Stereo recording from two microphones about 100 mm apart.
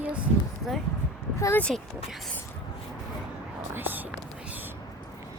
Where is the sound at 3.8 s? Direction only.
20° right (ahead or behind).